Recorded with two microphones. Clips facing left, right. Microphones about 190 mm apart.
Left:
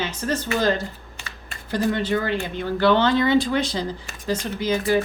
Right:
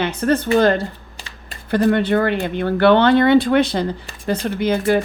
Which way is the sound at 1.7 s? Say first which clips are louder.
Right 6 dB; 60° right (ahead or behind).